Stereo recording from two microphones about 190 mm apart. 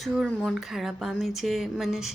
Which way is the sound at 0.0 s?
Centre (ahead or behind).